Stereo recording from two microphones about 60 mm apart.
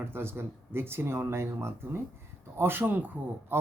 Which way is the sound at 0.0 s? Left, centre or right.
Right.